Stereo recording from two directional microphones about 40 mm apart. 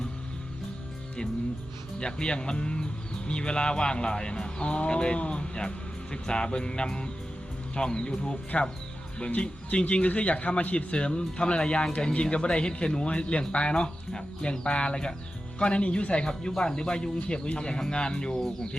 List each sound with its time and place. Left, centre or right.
2.0 s speech: left
8.5 s a man's voice: left
10.9 s speech: left
16.3 s speech: centre